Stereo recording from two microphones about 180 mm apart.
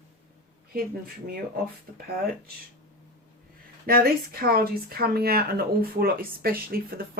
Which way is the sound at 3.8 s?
55° right (ahead or behind).